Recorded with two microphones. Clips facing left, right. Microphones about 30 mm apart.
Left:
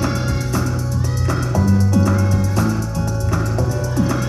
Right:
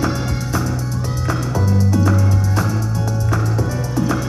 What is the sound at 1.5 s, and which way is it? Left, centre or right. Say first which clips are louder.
Music: left 3 dB; right.